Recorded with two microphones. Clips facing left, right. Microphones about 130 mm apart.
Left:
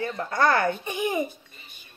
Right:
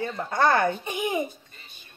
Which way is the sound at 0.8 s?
15° right (ahead or behind).